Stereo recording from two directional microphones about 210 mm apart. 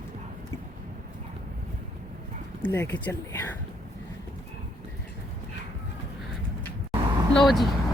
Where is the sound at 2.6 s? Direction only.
10° left (ahead or behind).